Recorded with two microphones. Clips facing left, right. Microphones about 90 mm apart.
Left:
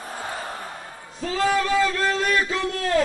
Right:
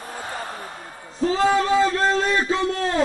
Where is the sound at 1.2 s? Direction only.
25° right (ahead or behind).